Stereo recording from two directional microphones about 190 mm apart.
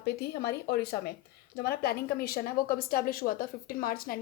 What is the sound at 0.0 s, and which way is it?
A woman's voice, 55° left (ahead or behind).